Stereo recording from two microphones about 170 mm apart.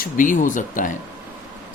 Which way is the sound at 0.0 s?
50° left (ahead or behind).